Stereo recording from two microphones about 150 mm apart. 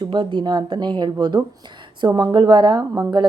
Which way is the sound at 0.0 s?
30° right (ahead or behind).